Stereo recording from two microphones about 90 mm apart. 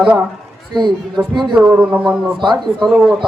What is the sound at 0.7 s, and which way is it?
Speech, 55° right (ahead or behind).